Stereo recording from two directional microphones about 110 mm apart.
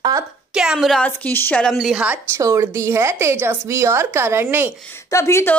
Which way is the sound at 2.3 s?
25° right (ahead or behind).